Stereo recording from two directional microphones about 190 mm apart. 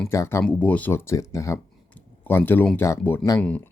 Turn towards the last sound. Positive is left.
turn(degrees=5)  # may be behind; listen again after turning